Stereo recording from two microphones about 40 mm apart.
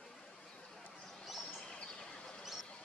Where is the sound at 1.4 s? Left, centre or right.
Centre.